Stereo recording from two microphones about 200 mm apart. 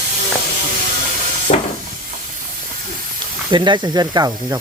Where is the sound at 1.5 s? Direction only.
40° left (ahead or behind).